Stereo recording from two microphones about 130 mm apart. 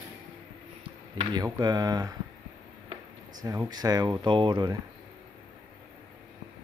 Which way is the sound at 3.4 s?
25° right (ahead or behind).